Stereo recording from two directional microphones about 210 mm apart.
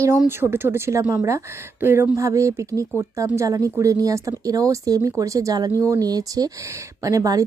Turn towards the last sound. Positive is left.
turn(degrees=-15)  # may be behind; listen again after turning